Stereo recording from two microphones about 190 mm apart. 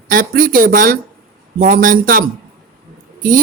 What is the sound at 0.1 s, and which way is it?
A woman's voice, 50° right (ahead or behind).